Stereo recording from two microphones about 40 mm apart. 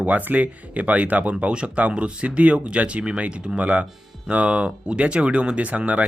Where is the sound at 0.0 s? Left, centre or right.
Right.